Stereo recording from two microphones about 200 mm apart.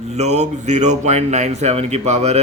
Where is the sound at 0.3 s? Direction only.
35° right (ahead or behind).